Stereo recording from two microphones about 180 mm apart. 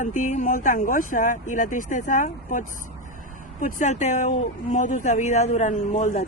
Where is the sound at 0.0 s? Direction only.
45° left (ahead or behind).